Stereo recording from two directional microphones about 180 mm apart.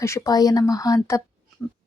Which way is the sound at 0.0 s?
20° left (ahead or behind).